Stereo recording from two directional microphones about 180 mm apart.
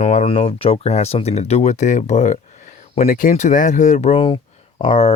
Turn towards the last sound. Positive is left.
turn(degrees=30)  # may be behind; listen again after turning